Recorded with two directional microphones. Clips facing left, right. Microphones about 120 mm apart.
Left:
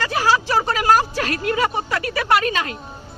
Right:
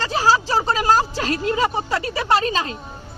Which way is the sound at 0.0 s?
30° right (ahead or behind).